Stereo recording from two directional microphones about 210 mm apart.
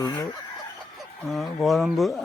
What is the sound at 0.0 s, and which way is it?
Speech, 20° left (ahead or behind).